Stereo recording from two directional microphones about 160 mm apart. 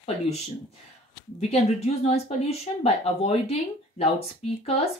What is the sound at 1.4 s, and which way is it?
Speech, 40° left (ahead or behind).